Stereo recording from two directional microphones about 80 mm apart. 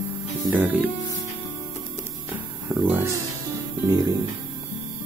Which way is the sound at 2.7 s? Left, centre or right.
Right.